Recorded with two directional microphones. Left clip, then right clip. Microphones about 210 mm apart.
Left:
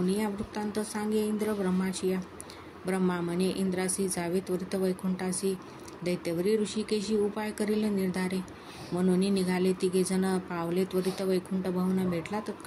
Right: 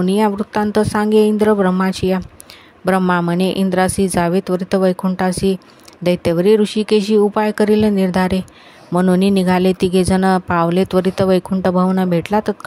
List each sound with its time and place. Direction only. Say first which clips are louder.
0.0 s speech: right 15 dB; 45° right (ahead or behind)